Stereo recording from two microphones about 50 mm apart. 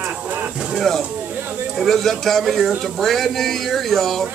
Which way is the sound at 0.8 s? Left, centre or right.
Centre.